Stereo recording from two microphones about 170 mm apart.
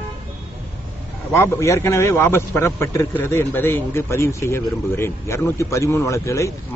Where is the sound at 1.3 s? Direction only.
15° left (ahead or behind).